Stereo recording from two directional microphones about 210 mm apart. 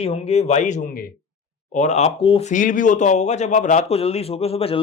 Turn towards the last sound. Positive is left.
turn(degrees=25)  # may be behind; listen again after turning